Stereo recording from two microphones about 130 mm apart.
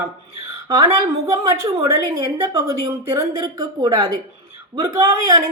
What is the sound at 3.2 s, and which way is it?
Speech, 30° right (ahead or behind).